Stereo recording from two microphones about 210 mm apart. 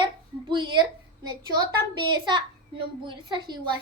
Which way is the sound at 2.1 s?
20° right (ahead or behind).